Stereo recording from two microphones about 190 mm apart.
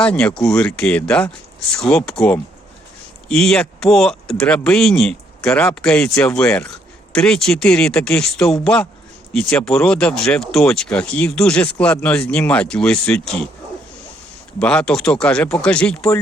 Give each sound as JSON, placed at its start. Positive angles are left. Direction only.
{"t": 0.0, "sound": "speech", "side_deg": 5}
{"t": 14.6, "sound": "speech", "side_deg": 5}